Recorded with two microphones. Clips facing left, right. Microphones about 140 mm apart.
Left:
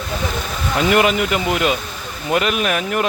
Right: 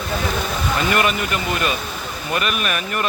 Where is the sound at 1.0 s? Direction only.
90° left.